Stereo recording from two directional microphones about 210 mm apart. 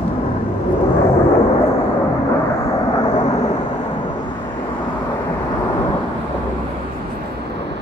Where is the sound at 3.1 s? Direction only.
35° left (ahead or behind).